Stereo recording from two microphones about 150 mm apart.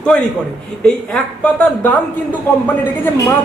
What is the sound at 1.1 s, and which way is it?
Speech, 10° left (ahead or behind).